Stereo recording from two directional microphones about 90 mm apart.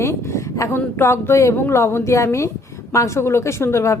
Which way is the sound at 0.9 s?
30° left (ahead or behind).